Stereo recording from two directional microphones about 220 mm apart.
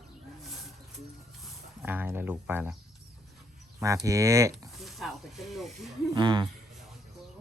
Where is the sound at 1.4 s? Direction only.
10° right (ahead or behind).